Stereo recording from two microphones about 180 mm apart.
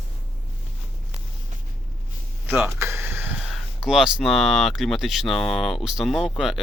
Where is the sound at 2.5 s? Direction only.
15° right (ahead or behind).